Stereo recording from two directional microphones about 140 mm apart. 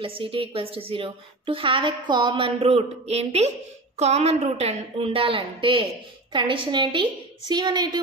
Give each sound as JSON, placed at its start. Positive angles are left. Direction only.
{"t": 0.0, "sound": "a woman's voice", "side_deg": -40}